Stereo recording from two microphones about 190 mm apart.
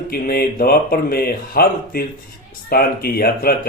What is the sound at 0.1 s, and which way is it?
Speech, 55° left (ahead or behind).